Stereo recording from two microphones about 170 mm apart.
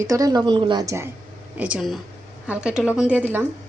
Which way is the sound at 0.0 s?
20° right (ahead or behind).